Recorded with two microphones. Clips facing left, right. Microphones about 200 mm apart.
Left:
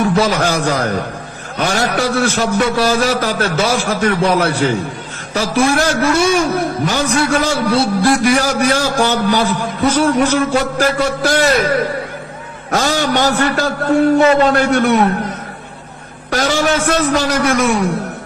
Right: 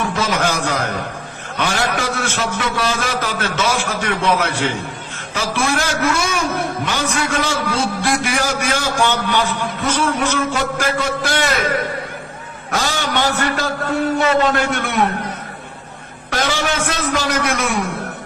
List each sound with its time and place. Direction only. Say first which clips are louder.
0.2 s a man's voice: left 4 dB; 40° left (ahead or behind)
12.7 s a man's voice: left 5 dB; 40° left (ahead or behind)
16.3 s a man's voice: left 5 dB; 45° left (ahead or behind)